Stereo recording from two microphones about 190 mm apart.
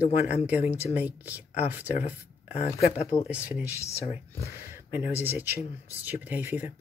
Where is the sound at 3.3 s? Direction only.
10° right (ahead or behind).